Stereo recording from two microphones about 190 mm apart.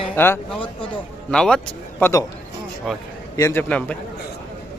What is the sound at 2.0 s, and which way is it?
Speech, 15° left (ahead or behind).